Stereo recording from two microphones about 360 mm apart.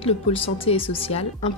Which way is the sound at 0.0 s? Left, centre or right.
Centre.